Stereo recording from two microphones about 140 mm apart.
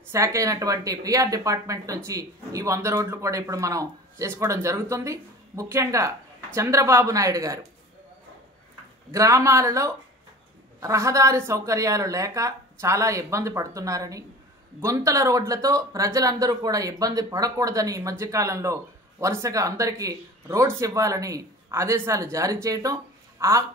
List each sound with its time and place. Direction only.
0.1 s speech: 20° right (ahead or behind)
9.1 s speech: 25° right (ahead or behind)